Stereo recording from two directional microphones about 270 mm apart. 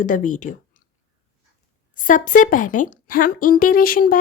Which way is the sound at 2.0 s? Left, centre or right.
Left.